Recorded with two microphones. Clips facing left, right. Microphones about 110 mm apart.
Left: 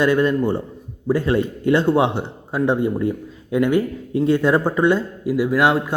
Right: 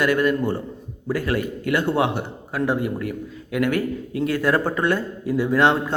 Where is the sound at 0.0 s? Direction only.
25° left (ahead or behind).